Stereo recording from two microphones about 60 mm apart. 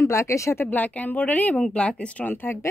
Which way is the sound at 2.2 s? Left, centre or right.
Left.